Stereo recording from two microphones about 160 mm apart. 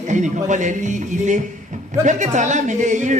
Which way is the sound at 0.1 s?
50° right (ahead or behind).